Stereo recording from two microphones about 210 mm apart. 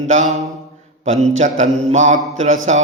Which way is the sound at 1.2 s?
35° right (ahead or behind).